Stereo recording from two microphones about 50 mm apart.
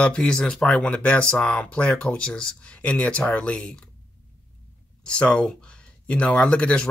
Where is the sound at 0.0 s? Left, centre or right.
Centre.